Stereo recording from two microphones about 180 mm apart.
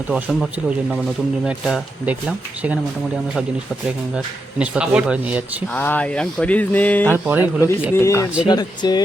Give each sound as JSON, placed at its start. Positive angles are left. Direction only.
{"t": 0.1, "sound": "speech", "side_deg": 0}
{"t": 1.5, "sound": "speech", "side_deg": -5}
{"t": 4.6, "sound": "speech", "side_deg": -5}
{"t": 5.7, "sound": "speech", "side_deg": 10}
{"t": 7.1, "sound": "speech", "side_deg": -10}
{"t": 7.4, "sound": "speech", "side_deg": 15}